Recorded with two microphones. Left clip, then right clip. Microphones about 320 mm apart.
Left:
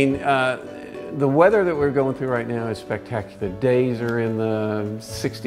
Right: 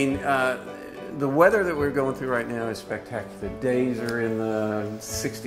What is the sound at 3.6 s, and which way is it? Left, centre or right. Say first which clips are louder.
Speech: left 5 dB; left.